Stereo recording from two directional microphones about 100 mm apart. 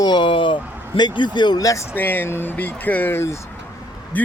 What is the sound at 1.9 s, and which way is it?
Speech, 20° left (ahead or behind).